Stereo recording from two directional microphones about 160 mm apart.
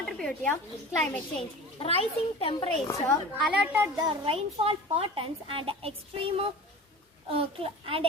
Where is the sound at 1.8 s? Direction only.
35° left (ahead or behind).